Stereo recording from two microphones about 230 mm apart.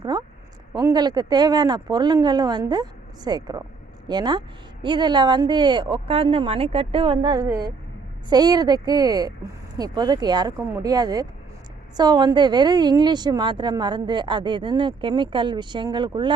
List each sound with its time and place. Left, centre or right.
0.7 s a woman's voice: centre